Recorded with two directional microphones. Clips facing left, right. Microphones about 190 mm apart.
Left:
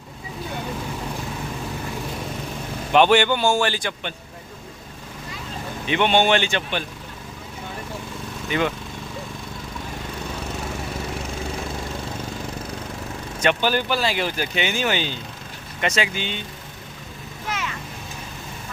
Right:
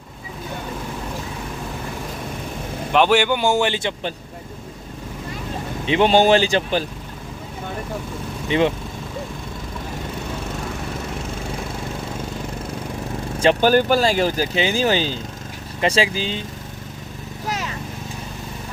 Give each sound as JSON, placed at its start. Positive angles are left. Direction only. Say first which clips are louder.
{"t": 2.9, "sound": "a man's voice", "louder": "even", "side_deg": -5}
{"t": 5.8, "sound": "speech", "louder": "right 4 dB", "side_deg": -30}
{"t": 8.4, "sound": "speech", "louder": "right 5 dB", "side_deg": -30}
{"t": 13.6, "sound": "speech", "louder": "right 7 dB", "side_deg": -45}
{"t": 17.4, "sound": "vehicle", "louder": "right 2 dB", "side_deg": -40}